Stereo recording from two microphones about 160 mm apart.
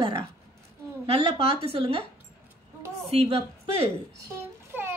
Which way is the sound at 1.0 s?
35° right (ahead or behind).